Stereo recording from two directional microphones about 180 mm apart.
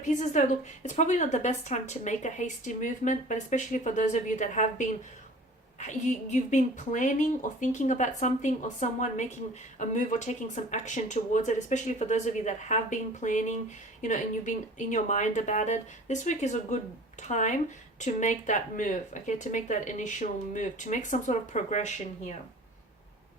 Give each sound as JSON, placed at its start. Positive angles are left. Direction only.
{"t": 0.0, "sound": "a woman's voice", "side_deg": 45}